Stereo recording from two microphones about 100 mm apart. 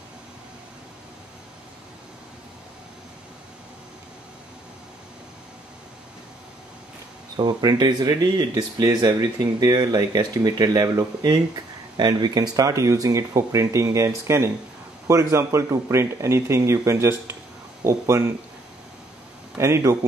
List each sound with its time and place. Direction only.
7.3 s speech: 45° right (ahead or behind); by 18.3 s 25° right (ahead or behind)
19.6 s speech: 30° right (ahead or behind)